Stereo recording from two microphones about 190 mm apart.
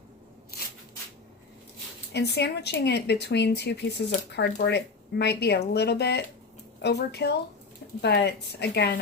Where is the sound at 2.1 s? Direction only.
60° left (ahead or behind).